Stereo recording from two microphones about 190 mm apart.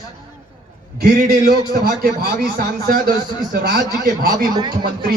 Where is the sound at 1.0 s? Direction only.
50° right (ahead or behind).